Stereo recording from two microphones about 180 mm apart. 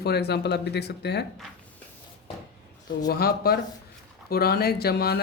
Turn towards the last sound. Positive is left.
turn(degrees=60)  # may be behind; listen again after turning